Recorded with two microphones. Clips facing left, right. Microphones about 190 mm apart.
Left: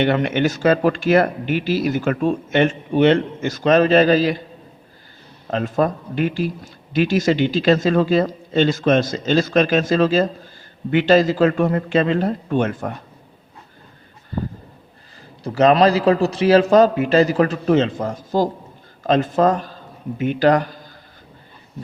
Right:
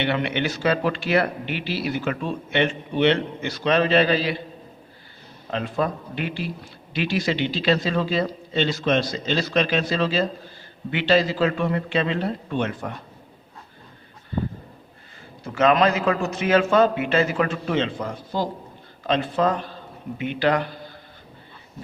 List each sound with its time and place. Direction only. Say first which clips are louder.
0.0 s speech: left 6 dB; 45° left (ahead or behind)
5.5 s speech: left 5 dB; 45° left (ahead or behind)
15.4 s a man's voice: left 5 dB; 35° left (ahead or behind)